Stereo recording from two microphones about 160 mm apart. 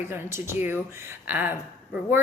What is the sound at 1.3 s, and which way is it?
Speech, 10° right (ahead or behind).